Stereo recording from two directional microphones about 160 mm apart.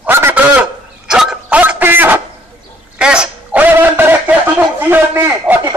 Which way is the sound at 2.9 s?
5° right (ahead or behind).